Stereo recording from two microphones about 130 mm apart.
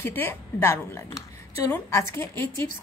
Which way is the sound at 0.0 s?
15° left (ahead or behind).